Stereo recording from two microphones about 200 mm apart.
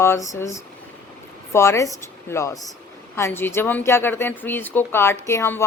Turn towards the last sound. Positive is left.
turn(degrees=15)  # may be behind; listen again after turning